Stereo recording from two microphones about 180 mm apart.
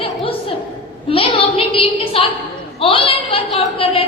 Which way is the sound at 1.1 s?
30° left (ahead or behind).